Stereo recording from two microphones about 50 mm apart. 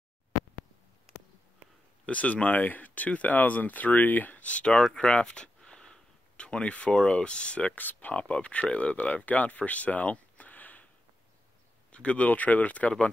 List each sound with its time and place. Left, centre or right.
2.0 s speech: left
7.7 s speech: left
8.1 s speech: left
11.9 s speech: left